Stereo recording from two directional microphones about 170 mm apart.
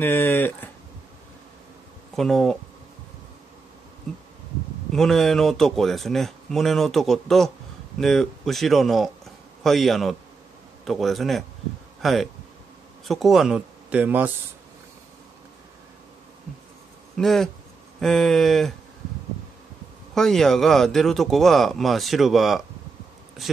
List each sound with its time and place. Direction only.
0.0 s speech: 10° left (ahead or behind)
2.1 s speech: centre (ahead or behind)
4.1 s bee: centre (ahead or behind)
4.9 s a man's voice: centre (ahead or behind)
17.2 s speech: centre (ahead or behind)
20.2 s speech: centre (ahead or behind)